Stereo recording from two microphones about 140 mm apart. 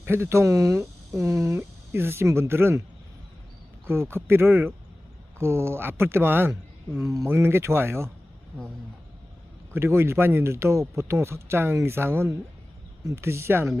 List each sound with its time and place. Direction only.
0.0 s speech: 15° right (ahead or behind)
3.8 s speech: 15° right (ahead or behind)
9.7 s speech: 15° right (ahead or behind)